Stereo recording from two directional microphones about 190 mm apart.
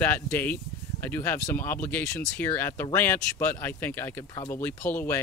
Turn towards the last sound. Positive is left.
turn(degrees=10)  # may be behind; listen again after turning